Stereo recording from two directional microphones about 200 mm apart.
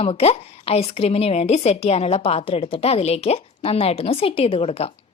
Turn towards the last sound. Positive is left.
turn(degrees=30)  # may be behind; listen again after turning